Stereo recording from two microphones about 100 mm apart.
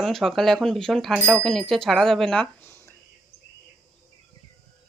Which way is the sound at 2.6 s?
25° left (ahead or behind).